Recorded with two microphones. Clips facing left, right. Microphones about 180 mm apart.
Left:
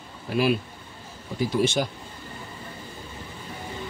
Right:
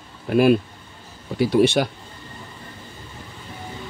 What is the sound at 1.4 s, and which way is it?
Speech, 65° right (ahead or behind).